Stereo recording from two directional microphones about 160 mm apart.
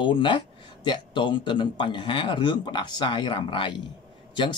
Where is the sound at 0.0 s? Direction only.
30° left (ahead or behind).